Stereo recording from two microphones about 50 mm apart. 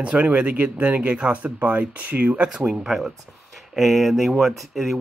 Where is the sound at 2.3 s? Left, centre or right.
Centre.